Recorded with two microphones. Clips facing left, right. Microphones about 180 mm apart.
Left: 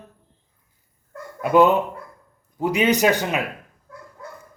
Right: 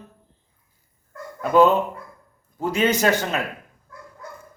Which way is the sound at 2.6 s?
15° left (ahead or behind).